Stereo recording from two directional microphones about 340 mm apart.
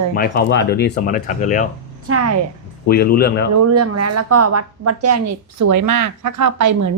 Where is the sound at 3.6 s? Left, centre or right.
Right.